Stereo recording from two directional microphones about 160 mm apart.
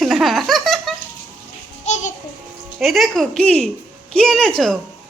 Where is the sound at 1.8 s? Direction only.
45° left (ahead or behind).